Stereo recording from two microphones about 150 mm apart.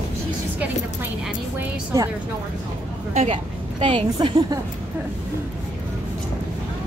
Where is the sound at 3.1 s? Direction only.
45° right (ahead or behind).